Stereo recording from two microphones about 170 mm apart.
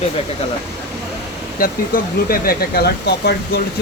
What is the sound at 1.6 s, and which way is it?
Speech, 60° left (ahead or behind).